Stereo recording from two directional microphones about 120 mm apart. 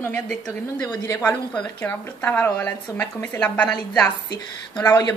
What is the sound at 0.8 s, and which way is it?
Speech, 35° left (ahead or behind).